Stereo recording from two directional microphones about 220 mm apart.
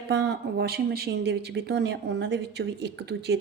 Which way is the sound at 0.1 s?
50° right (ahead or behind).